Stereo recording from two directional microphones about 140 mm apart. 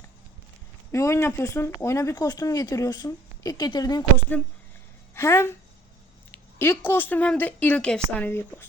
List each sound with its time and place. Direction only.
0.9 s speech: 20° left (ahead or behind)
5.1 s a woman's voice: 20° left (ahead or behind)